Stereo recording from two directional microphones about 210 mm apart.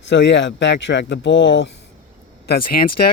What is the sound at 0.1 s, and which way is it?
Speech, 60° left (ahead or behind).